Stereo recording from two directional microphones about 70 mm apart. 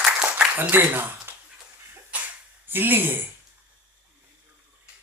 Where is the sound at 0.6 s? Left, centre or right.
Right.